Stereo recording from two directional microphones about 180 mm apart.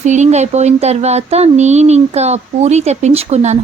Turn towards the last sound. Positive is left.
turn(degrees=-40)  # may be behind; listen again after turning